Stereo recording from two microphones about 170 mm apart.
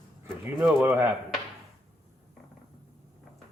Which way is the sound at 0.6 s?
5° right (ahead or behind).